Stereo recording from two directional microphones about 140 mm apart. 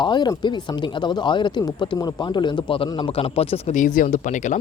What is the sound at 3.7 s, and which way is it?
Speech, 65° left (ahead or behind).